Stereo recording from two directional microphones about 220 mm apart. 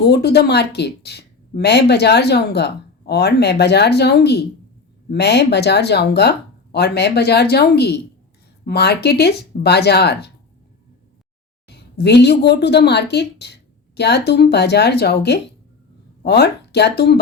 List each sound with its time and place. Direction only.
0.0 s a woman's voice: 50° left (ahead or behind)
11.7 s a woman's voice: 50° left (ahead or behind)